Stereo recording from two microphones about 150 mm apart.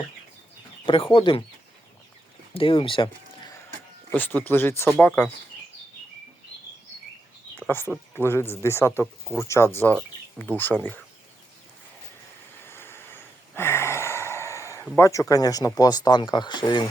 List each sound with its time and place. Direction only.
0.9 s speech: 35° left (ahead or behind)
2.5 s speech: 35° left (ahead or behind)
4.1 s speech: 10° left (ahead or behind)
7.7 s speech: 15° left (ahead or behind)
12.6 s a sound: 15° left (ahead or behind)
14.9 s speech: 20° left (ahead or behind)